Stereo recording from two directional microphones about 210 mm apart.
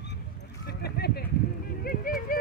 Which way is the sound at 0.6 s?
50° left (ahead or behind).